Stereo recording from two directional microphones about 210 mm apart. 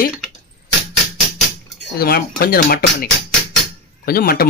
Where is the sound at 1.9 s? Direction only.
45° left (ahead or behind).